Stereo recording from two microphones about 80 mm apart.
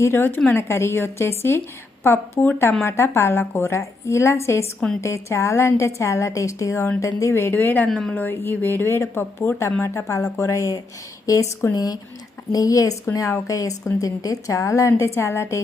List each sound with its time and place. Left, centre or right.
0.0 s speech: left
7.9 s a woman's voice: centre
8.1 s speech: left